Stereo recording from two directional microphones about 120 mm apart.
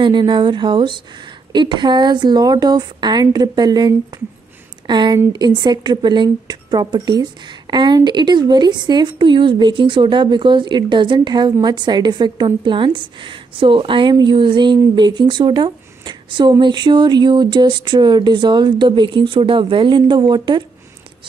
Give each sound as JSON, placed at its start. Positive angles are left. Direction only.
{"t": 0.0, "sound": "a woman's voice", "side_deg": -40}